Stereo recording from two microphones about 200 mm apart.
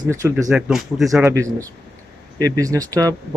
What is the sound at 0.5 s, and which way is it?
Speech, centre (ahead or behind).